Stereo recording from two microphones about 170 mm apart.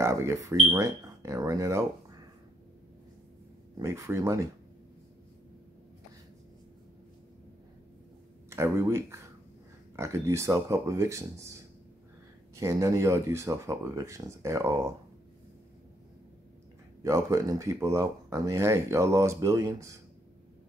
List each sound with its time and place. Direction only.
0.0 s speech: 15° right (ahead or behind)
3.8 s speech: 15° right (ahead or behind)
8.5 s speech: 15° right (ahead or behind)
12.5 s speech: 15° right (ahead or behind)
17.0 s speech: 20° right (ahead or behind)